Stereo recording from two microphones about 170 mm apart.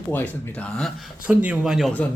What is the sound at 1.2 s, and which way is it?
Speech, 5° right (ahead or behind).